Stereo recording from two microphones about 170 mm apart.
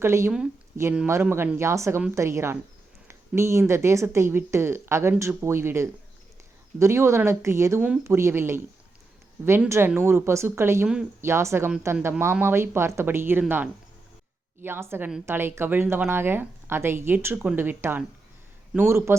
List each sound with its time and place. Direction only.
0.0 s a woman's voice: 15° right (ahead or behind)
14.6 s a woman's voice: 15° right (ahead or behind)